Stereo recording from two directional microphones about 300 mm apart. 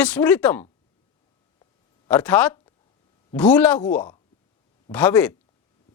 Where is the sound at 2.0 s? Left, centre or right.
Centre.